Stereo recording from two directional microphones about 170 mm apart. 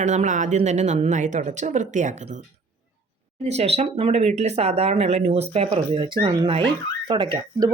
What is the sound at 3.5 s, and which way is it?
Speech, 40° right (ahead or behind).